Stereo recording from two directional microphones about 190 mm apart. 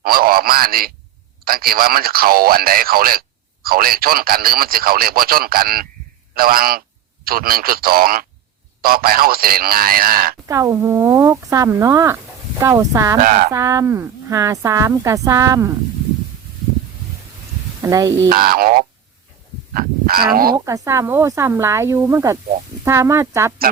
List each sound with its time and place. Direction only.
0.0 s a man's voice: 50° right (ahead or behind)
10.5 s speech: 15° right (ahead or behind)
13.2 s speech: 45° right (ahead or behind)
13.5 s speech: 15° right (ahead or behind)
17.8 s speech: 15° right (ahead or behind)
18.3 s speech: 50° right (ahead or behind)
19.7 s livestock: 50° right (ahead or behind)
20.7 s speech: 15° right (ahead or behind)